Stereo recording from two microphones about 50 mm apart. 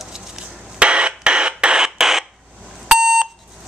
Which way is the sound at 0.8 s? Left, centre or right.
Right.